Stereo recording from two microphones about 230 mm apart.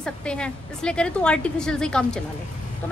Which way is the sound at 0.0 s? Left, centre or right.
Centre.